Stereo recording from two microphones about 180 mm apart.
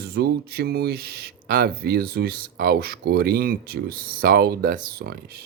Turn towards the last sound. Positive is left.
turn(degrees=-60)  # may be behind; listen again after turning